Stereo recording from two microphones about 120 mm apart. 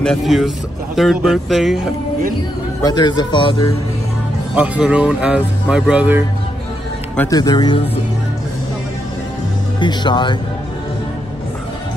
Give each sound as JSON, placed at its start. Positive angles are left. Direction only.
{"t": 0.0, "sound": "speech", "side_deg": 5}
{"t": 2.8, "sound": "speech", "side_deg": 35}
{"t": 4.6, "sound": "speech", "side_deg": -10}
{"t": 7.2, "sound": "speech", "side_deg": 30}
{"t": 9.8, "sound": "speech", "side_deg": 40}